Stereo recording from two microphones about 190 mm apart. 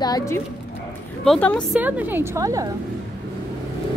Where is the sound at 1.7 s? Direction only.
10° right (ahead or behind).